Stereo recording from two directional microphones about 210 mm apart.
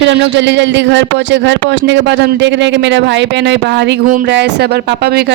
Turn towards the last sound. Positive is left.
turn(degrees=-50)  # may be behind; listen again after turning